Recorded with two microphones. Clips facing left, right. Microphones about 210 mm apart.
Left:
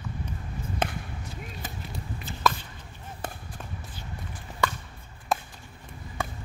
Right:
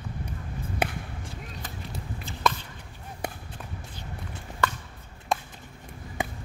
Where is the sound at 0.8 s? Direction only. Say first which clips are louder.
Right 1 dB; 10° right (ahead or behind).